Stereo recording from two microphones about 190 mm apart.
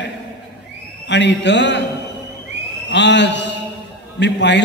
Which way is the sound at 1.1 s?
65° left (ahead or behind).